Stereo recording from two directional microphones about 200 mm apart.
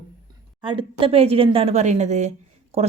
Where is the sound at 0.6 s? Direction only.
25° right (ahead or behind).